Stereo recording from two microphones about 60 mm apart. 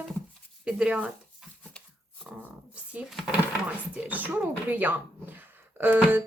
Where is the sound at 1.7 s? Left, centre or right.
Centre.